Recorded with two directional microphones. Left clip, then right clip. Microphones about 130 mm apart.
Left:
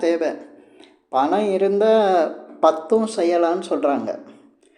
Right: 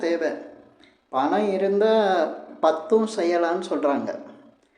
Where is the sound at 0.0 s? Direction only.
20° left (ahead or behind).